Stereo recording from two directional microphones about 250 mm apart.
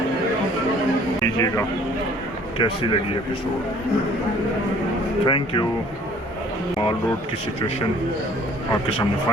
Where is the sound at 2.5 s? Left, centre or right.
Centre.